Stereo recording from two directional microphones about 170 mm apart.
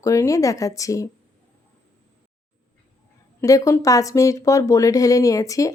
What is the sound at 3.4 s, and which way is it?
Speech, 20° left (ahead or behind).